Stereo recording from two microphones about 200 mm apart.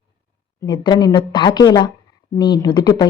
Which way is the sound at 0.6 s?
20° left (ahead or behind).